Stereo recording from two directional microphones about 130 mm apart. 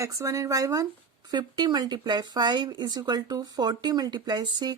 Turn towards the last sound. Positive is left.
turn(degrees=-35)  # may be behind; listen again after turning